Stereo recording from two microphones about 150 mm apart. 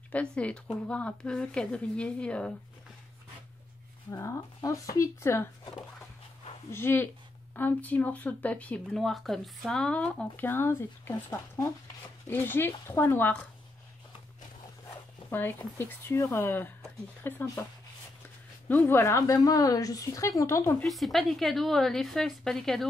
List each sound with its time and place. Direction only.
0.1 s speech: 10° left (ahead or behind)
4.1 s speech: 20° left (ahead or behind)
14.9 s speech: 15° left (ahead or behind)
18.7 s speech: 15° left (ahead or behind)
20.8 s a woman's voice: centre (ahead or behind)